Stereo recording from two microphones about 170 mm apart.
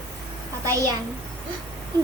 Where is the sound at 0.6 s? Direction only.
20° right (ahead or behind).